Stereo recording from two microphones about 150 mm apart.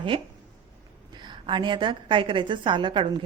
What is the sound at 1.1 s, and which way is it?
A woman's voice, 30° right (ahead or behind).